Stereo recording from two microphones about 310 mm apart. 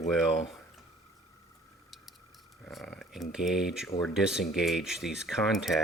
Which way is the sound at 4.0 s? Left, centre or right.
Centre.